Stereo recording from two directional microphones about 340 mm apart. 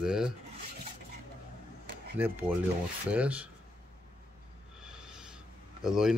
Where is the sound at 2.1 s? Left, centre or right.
Centre.